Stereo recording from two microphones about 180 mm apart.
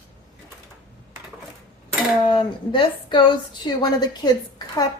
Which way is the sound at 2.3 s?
25° left (ahead or behind).